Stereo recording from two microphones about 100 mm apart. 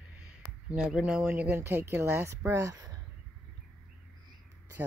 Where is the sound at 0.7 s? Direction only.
10° right (ahead or behind).